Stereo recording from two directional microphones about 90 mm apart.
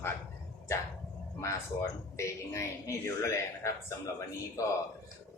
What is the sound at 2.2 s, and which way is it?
A man's voice, 35° left (ahead or behind).